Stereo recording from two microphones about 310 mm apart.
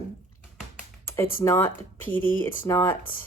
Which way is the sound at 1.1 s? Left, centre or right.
Centre.